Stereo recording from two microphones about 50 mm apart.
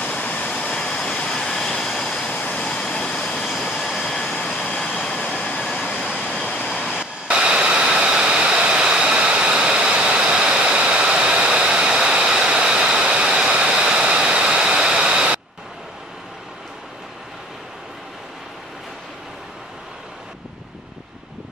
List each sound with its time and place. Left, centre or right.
0.0 s vehicle: left; by 2.3 s centre
2.3 s vehicle: left
2.6 s vehicle: centre
4.7 s vehicle: centre
5.4 s vehicle: left
5.7 s vehicle: centre
6.2 s waterfall: centre
7.2 s jet engine: centre